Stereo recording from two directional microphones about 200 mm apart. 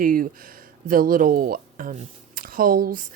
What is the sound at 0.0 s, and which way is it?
Speech, 45° right (ahead or behind).